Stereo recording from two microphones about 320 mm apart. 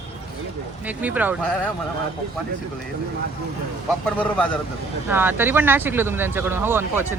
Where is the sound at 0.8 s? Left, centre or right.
Centre.